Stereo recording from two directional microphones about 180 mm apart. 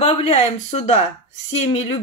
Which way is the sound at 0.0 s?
35° left (ahead or behind).